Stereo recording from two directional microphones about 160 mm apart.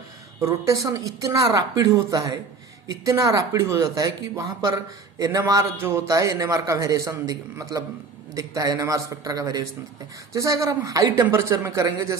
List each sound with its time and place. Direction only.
0.3 s a man's voice: 20° right (ahead or behind)